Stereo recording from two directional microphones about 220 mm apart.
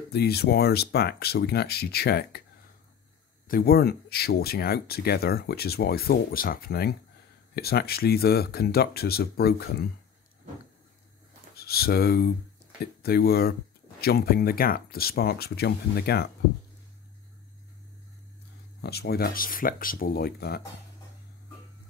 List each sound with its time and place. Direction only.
0.1 s speech: 45° left (ahead or behind)
3.4 s speech: 45° left (ahead or behind)
11.5 s speech: 45° left (ahead or behind)
18.8 s speech: 45° left (ahead or behind)